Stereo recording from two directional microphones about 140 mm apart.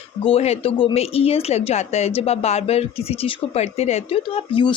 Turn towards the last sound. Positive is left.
turn(degrees=40)  # may be behind; listen again after turning